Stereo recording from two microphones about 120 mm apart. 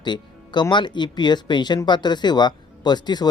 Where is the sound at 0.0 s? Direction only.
40° left (ahead or behind).